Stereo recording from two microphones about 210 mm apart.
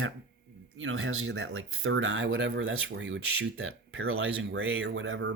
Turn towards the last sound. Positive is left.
turn(degrees=-65)  # may be behind; listen again after turning